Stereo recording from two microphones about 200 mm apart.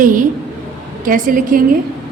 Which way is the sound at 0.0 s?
40° right (ahead or behind).